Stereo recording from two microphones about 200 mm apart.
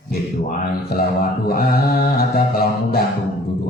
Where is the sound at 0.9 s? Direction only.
50° left (ahead or behind).